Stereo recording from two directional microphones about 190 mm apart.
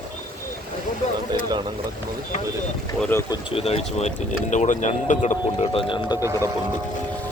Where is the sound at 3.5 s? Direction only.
30° left (ahead or behind).